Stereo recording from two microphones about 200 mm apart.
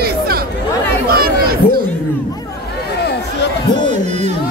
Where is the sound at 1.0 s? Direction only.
50° right (ahead or behind).